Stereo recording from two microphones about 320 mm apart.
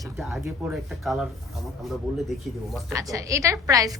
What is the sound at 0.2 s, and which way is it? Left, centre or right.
Speech, centre.